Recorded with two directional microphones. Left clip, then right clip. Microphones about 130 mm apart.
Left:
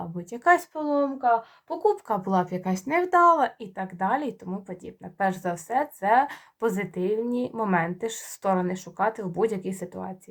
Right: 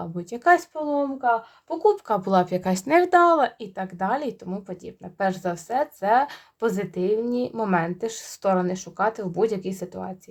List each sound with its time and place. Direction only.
0.0 s speech: 40° right (ahead or behind)
0.7 s speech: 5° right (ahead or behind)
1.8 s speech: 35° right (ahead or behind)
2.1 s speech: 55° right (ahead or behind); by 10.2 s 35° right (ahead or behind)